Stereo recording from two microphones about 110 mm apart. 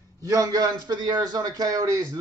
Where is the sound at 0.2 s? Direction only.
30° right (ahead or behind).